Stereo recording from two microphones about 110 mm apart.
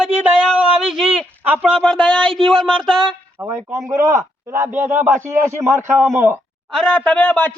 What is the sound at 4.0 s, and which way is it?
Speech, 30° right (ahead or behind).